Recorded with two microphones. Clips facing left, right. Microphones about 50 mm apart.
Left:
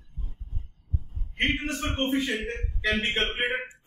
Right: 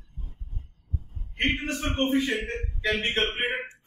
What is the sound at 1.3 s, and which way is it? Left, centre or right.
A man's voice, centre.